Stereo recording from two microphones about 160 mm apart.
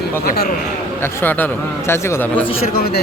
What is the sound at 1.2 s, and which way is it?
A man's voice, 10° left (ahead or behind).